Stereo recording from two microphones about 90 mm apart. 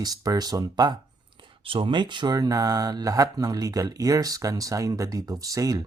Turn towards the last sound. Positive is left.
turn(degrees=-40)  # may be behind; listen again after turning